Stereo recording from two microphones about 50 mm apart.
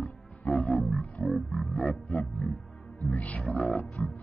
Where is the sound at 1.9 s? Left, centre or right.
Left.